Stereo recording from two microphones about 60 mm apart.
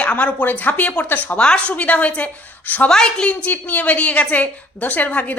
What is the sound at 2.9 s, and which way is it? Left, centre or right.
Speech, centre.